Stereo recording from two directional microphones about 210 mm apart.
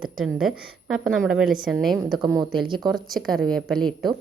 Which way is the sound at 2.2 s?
20° right (ahead or behind).